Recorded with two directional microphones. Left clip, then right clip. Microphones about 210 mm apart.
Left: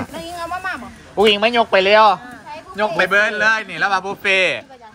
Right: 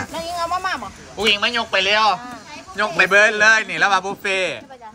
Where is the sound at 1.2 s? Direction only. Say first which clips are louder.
Left 4 dB; 25° left (ahead or behind).